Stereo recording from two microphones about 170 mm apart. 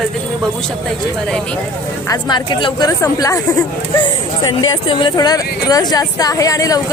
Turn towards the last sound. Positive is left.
turn(degrees=20)  # may be behind; listen again after turning